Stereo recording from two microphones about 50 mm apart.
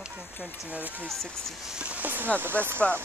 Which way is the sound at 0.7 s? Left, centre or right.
Right.